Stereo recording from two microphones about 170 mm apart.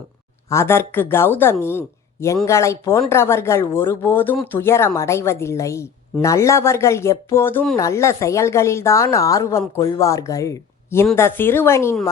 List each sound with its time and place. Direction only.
0.5 s a woman's voice: 15° left (ahead or behind)